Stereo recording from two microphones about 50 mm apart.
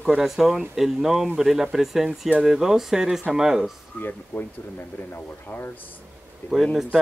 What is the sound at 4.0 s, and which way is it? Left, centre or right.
Speech, left.